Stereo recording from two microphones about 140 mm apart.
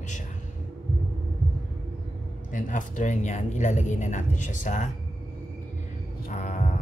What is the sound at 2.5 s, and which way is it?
Speech, 65° left (ahead or behind).